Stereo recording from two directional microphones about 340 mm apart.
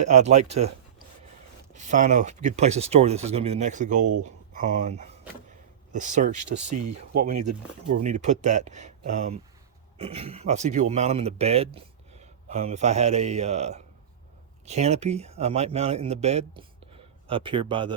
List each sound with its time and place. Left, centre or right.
0.0 s speech: centre
1.7 s speech: right
6.7 s speech: right
8.0 s speech: right